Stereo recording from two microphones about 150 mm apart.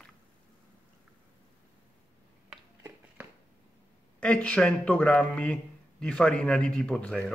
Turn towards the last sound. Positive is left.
turn(degrees=5)  # may be behind; listen again after turning